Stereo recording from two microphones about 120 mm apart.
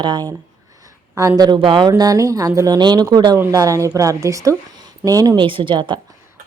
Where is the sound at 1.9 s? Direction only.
30° right (ahead or behind).